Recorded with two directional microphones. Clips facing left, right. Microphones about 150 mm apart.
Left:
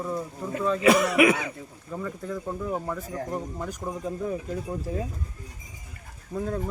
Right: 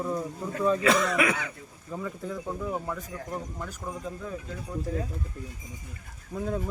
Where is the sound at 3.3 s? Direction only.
15° left (ahead or behind).